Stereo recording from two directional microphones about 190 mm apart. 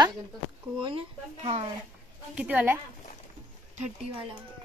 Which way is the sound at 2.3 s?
5° right (ahead or behind).